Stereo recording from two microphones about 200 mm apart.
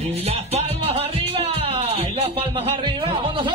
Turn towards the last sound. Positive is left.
turn(degrees=-25)  # may be behind; listen again after turning